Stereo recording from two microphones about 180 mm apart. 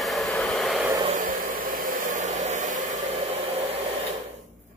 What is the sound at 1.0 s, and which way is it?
Hair dryer, 45° right (ahead or behind).